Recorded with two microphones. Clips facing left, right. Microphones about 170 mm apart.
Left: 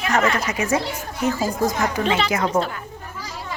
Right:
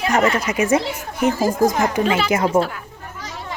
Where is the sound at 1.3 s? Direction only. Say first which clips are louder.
Right 5 dB; 45° right (ahead or behind).